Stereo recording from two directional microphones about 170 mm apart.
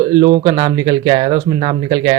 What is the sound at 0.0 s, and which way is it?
Speech, 30° right (ahead or behind).